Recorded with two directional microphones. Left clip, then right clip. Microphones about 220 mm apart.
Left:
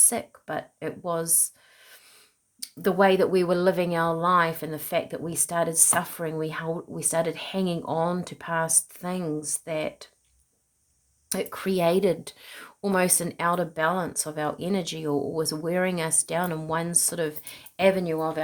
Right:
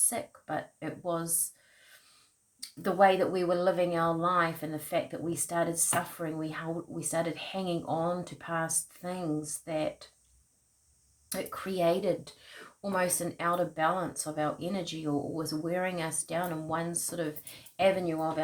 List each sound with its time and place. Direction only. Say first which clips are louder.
0.1 s speech: left 4 dB; 45° left (ahead or behind)
2.6 s speech: left 3 dB; 50° left (ahead or behind)
11.3 s speech: left 7 dB; 50° left (ahead or behind)